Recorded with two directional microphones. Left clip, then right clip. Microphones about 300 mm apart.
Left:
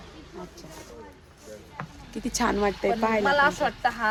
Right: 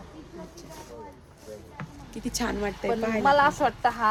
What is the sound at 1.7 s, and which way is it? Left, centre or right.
Speech, centre.